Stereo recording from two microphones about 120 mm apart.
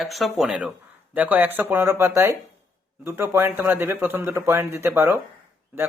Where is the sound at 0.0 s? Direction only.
Centre (ahead or behind).